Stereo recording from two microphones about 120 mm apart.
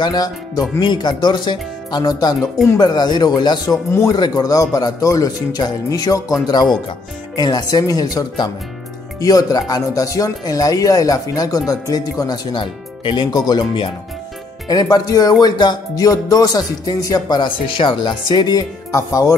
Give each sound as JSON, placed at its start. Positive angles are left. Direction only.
{"t": 0.0, "sound": "speech", "side_deg": 35}
{"t": 3.9, "sound": "speech", "side_deg": 25}